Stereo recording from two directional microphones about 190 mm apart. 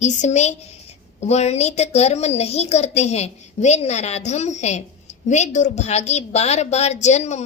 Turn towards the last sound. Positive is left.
turn(degrees=35)  # may be behind; listen again after turning